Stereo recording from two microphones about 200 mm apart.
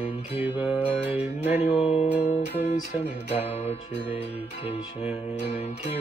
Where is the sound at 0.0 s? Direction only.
10° right (ahead or behind).